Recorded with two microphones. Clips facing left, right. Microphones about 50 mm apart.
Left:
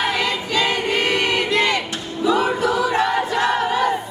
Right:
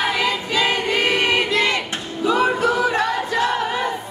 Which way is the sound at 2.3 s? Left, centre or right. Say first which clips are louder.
Right 2 dB; right.